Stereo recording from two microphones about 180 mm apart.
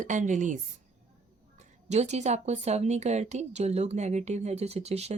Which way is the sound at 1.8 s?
40° right (ahead or behind).